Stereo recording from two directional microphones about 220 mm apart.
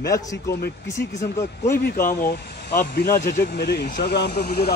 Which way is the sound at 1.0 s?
50° left (ahead or behind).